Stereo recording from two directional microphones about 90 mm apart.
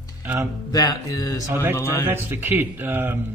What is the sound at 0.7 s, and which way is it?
Music, 45° left (ahead or behind).